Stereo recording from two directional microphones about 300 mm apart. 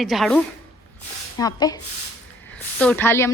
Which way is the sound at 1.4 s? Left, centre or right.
Centre.